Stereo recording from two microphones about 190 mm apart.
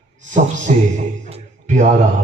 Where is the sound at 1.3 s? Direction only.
40° right (ahead or behind).